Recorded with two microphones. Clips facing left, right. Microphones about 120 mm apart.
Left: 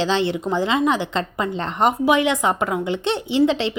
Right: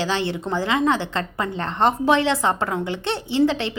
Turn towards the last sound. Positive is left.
turn(degrees=20)  # may be behind; listen again after turning